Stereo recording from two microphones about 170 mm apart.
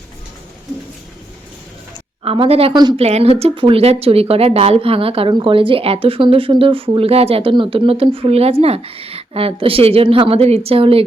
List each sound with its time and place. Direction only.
2.2 s a woman's voice: 35° right (ahead or behind)